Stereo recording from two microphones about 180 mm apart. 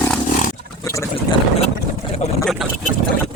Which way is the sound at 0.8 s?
15° left (ahead or behind).